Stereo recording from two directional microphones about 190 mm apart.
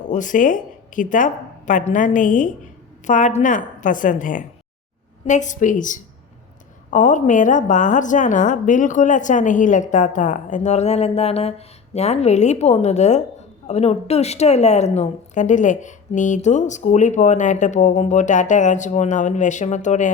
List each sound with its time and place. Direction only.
0.1 s a woman's voice: 40° left (ahead or behind)